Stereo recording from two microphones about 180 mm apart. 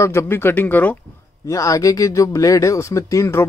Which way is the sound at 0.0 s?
15° left (ahead or behind).